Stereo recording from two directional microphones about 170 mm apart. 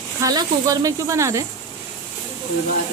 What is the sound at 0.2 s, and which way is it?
Speech, 20° right (ahead or behind).